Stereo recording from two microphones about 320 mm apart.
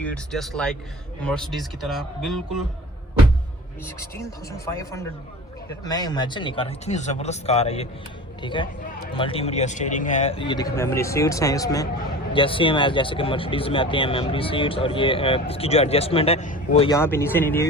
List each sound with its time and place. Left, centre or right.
0.0 s speech: centre
4.2 s speech: centre